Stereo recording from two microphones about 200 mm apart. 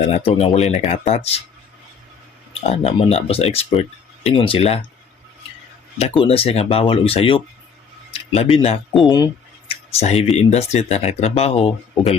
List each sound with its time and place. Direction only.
0.0 s speech: 30° left (ahead or behind)
2.5 s speech: 30° left (ahead or behind)
6.0 s speech: 30° left (ahead or behind)
9.0 s a sound: 20° left (ahead or behind)
9.9 s speech: 35° left (ahead or behind)